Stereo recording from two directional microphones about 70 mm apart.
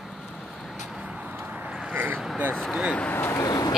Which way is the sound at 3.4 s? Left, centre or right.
Left.